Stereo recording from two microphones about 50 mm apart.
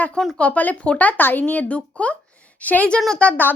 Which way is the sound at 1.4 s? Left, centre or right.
Left.